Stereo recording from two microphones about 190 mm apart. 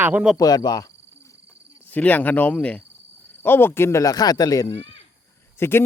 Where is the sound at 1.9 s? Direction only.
10° left (ahead or behind).